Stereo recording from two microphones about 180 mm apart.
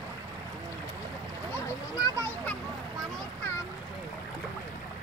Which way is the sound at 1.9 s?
20° left (ahead or behind).